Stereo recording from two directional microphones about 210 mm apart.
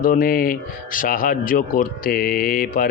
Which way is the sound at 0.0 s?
45° left (ahead or behind).